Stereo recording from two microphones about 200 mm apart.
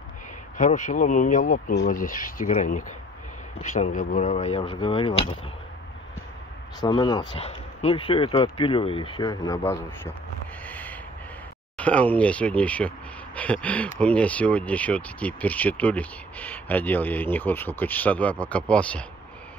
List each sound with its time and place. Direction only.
0.6 s speech: 35° left (ahead or behind)
6.8 s speech: 20° left (ahead or behind)
10.6 s fireworks: 10° left (ahead or behind)
11.7 s speech: 5° left (ahead or behind)